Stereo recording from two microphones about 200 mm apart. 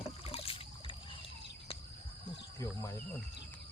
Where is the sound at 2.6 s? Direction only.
15° left (ahead or behind).